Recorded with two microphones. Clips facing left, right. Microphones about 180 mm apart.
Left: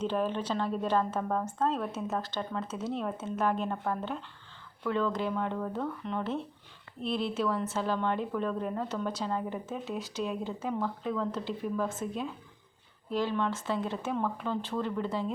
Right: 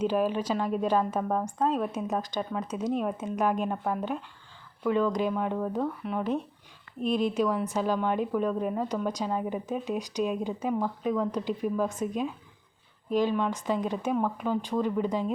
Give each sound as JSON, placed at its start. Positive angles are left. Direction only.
{"t": 0.0, "sound": "a woman's voice", "side_deg": -10}